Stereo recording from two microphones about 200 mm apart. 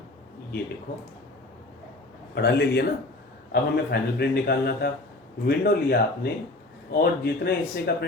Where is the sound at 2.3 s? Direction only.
55° left (ahead or behind).